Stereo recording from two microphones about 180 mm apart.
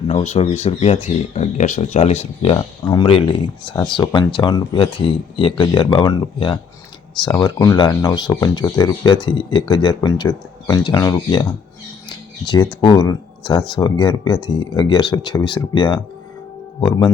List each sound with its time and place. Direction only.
0.1 s speech: 35° left (ahead or behind)
12.5 s speech: 20° left (ahead or behind)